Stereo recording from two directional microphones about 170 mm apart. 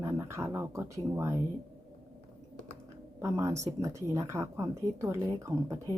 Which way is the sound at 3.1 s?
15° right (ahead or behind).